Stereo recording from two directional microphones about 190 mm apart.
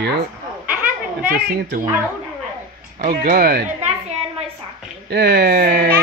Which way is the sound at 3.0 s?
45° right (ahead or behind).